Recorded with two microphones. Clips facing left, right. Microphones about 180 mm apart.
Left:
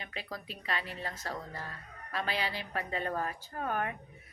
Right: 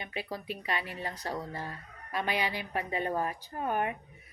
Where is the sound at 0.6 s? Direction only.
15° right (ahead or behind).